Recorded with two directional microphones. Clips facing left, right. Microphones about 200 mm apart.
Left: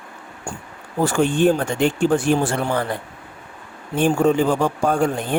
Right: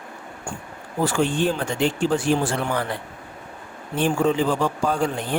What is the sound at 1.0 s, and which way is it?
Speech, 50° left (ahead or behind).